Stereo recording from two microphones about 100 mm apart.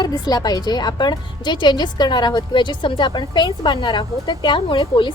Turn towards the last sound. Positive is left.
turn(degrees=55)  # may be behind; listen again after turning